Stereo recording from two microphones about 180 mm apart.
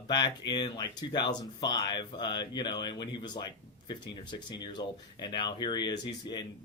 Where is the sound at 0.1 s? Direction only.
25° left (ahead or behind).